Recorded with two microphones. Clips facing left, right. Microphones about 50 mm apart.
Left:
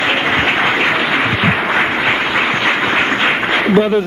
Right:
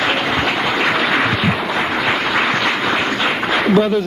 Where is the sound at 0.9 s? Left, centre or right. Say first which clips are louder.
Left 1 dB; centre.